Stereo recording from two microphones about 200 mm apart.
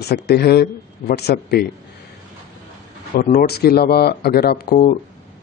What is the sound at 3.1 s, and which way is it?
Speech, 45° left (ahead or behind).